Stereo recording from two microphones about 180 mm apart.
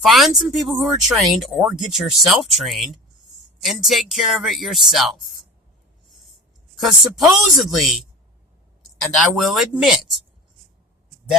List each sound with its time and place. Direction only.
0.0 s speech: centre (ahead or behind)
6.8 s speech: centre (ahead or behind)
9.3 s speech: centre (ahead or behind)